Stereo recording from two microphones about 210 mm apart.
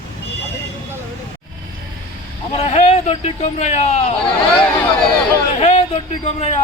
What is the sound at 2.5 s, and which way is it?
Speech, 30° left (ahead or behind).